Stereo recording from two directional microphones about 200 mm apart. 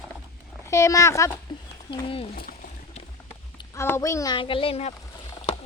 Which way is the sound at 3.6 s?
15° left (ahead or behind).